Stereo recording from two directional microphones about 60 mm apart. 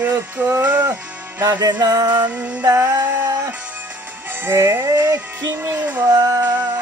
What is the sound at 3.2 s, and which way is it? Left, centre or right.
Music, right.